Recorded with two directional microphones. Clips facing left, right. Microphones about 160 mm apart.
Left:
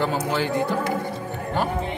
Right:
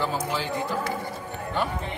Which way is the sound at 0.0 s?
65° left (ahead or behind).